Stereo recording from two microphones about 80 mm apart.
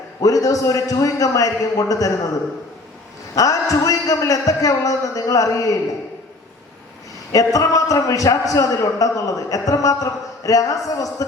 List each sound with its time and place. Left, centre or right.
0.2 s a man's voice: left
3.3 s a man's voice: left
7.3 s a man's voice: left